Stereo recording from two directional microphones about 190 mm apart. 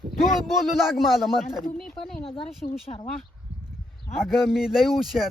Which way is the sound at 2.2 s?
30° left (ahead or behind).